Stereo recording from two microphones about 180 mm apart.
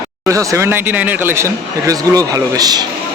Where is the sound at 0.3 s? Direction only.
15° right (ahead or behind).